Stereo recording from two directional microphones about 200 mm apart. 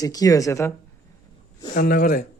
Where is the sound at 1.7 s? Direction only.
45° left (ahead or behind).